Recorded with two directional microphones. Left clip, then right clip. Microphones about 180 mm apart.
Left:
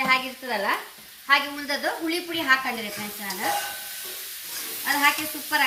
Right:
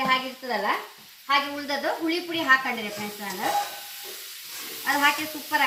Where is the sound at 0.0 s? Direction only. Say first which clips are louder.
Left 1 dB; 10° left (ahead or behind).